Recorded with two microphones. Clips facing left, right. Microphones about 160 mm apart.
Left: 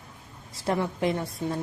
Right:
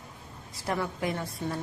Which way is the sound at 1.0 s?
25° left (ahead or behind).